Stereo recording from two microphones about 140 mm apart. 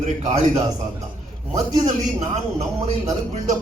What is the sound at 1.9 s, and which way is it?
Speech, 55° right (ahead or behind).